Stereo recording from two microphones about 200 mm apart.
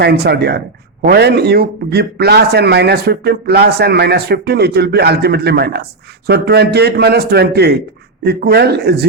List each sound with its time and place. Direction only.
0.0 s a man's voice: 55° right (ahead or behind)